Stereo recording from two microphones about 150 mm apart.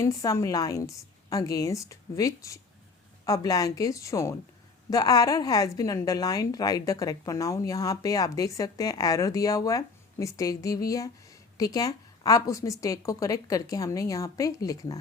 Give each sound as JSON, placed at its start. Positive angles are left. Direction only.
{"t": 0.0, "sound": "a woman's voice", "side_deg": 20}